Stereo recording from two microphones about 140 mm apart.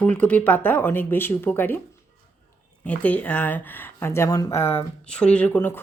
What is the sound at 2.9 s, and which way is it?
Speech, 10° left (ahead or behind).